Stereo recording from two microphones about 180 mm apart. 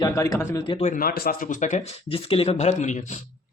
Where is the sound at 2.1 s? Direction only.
35° left (ahead or behind).